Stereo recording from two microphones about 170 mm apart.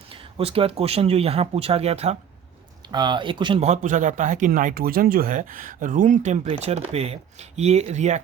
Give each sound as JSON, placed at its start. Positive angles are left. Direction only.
{"t": 0.1, "sound": "speech", "side_deg": -35}
{"t": 2.9, "sound": "speech", "side_deg": -25}
{"t": 3.6, "sound": "speech", "side_deg": -45}